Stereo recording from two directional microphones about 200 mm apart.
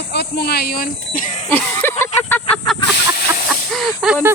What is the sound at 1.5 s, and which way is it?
Speech, 10° left (ahead or behind).